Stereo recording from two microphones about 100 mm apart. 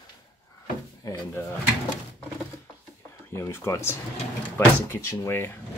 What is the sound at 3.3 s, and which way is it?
Speech, 25° left (ahead or behind).